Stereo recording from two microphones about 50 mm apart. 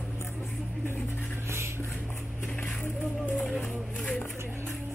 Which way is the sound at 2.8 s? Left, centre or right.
Left.